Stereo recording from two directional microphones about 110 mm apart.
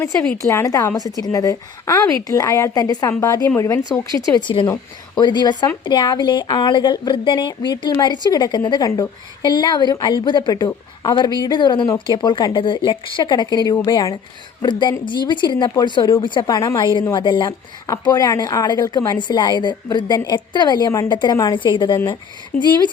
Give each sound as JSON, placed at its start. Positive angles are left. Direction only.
{"t": 0.0, "sound": "a woman's voice", "side_deg": 15}
{"t": 0.4, "sound": "a woman's voice", "side_deg": 30}
{"t": 4.4, "sound": "speech", "side_deg": 45}